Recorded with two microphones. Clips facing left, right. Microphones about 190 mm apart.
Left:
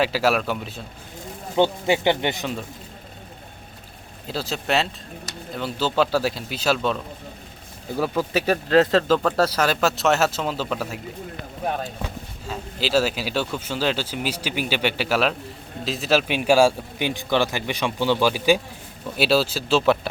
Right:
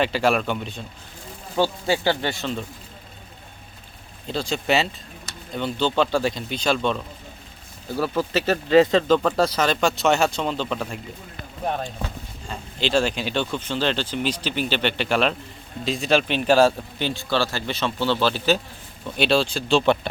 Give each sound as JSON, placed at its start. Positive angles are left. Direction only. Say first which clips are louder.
{"t": 0.0, "sound": "speech", "louder": "even", "side_deg": 5}
{"t": 1.5, "sound": "speech", "louder": "left 2 dB", "side_deg": 20}
{"t": 4.3, "sound": "speech", "louder": "right 2 dB", "side_deg": 5}
{"t": 7.9, "sound": "speech", "louder": "even", "side_deg": 15}
{"t": 8.7, "sound": "speech", "louder": "right 2 dB", "side_deg": 0}